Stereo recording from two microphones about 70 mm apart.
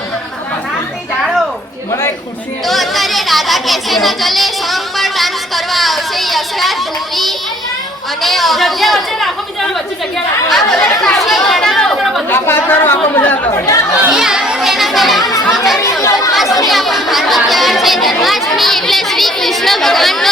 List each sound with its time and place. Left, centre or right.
1.2 s a sound: centre
1.9 s a sound: left
2.6 s a sound: centre
8.2 s a woman's voice: centre
11.2 s chatter: centre
12.3 s chatter: left
13.5 s chatter: left
14.1 s children playing: centre
15.3 s chatter: left
15.5 s chatter: centre
15.8 s chatter: left
16.3 s chatter: centre